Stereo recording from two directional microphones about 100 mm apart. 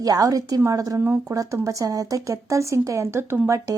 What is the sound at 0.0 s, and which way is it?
Speech, 35° right (ahead or behind).